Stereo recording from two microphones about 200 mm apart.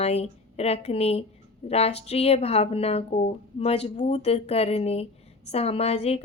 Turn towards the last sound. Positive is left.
turn(degrees=30)  # may be behind; listen again after turning